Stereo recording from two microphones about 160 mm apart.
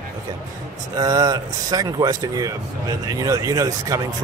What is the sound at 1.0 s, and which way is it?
Speech, 25° right (ahead or behind).